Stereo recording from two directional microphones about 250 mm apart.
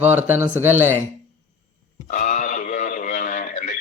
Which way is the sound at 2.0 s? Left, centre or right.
Left.